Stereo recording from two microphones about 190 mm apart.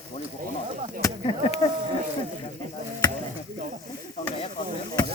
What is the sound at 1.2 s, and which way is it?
Speech, 30° left (ahead or behind).